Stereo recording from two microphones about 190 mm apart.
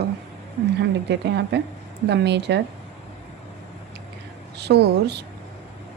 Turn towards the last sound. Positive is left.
turn(degrees=-60)  # may be behind; listen again after turning